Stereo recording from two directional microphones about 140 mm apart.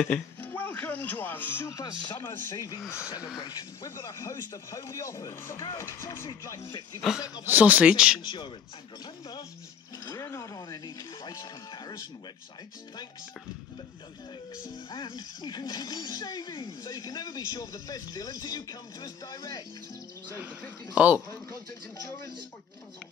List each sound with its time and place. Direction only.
0.0 s speech: 15° left (ahead or behind)
7.4 s speech: 10° right (ahead or behind)
8.2 s speech: 30° left (ahead or behind)
14.7 s speech: 30° left (ahead or behind)
20.9 s speech: 10° right (ahead or behind)